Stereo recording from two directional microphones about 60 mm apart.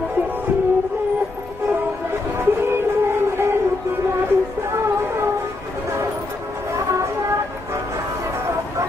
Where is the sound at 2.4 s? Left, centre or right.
Right.